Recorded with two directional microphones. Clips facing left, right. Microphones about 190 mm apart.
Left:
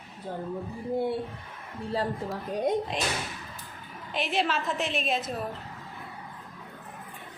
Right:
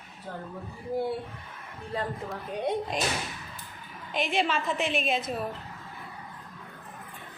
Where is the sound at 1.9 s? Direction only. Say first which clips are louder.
Left 3 dB; 30° left (ahead or behind).